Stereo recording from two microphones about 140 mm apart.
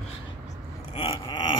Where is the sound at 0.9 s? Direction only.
45° left (ahead or behind).